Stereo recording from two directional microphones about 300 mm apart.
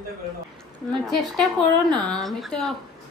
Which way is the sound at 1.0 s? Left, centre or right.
Centre.